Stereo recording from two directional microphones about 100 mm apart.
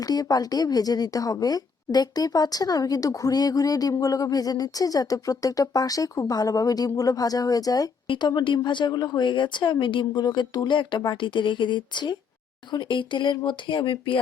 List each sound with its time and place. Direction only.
0.0 s a woman's voice: 40° left (ahead or behind)
8.0 s speech: 55° left (ahead or behind)
8.3 s a woman's voice: 45° left (ahead or behind)